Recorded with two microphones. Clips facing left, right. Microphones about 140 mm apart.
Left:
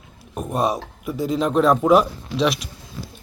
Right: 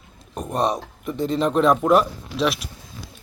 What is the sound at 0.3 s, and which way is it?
A man's voice, 5° left (ahead or behind).